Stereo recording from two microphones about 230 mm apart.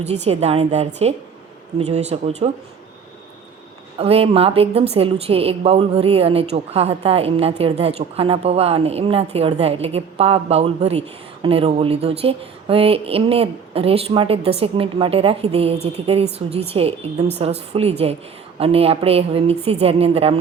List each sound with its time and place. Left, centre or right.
0.0 s a woman's voice: right
3.9 s a woman's voice: right